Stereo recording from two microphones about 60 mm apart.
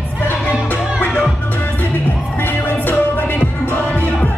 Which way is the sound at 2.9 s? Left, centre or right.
Left.